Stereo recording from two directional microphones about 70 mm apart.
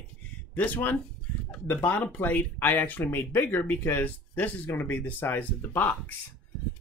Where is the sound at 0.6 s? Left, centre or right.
Left.